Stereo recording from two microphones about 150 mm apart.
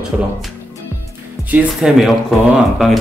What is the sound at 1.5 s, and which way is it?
Speech, 5° right (ahead or behind).